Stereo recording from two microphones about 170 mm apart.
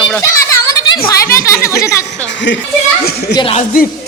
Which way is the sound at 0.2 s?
20° left (ahead or behind).